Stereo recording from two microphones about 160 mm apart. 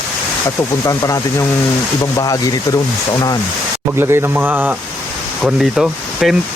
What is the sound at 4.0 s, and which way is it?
A man's voice, 15° right (ahead or behind).